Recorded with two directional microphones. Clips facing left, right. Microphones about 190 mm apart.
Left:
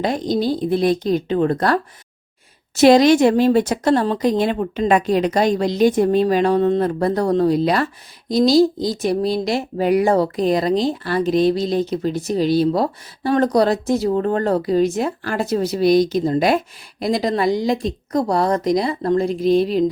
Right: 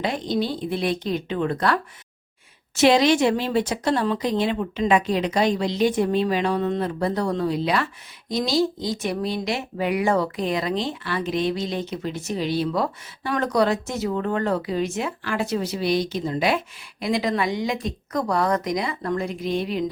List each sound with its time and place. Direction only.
0.0 s speech: 40° left (ahead or behind)